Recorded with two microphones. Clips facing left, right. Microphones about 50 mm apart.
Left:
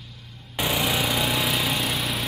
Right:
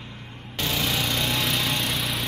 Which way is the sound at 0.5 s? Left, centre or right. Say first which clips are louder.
Left 2 dB; centre.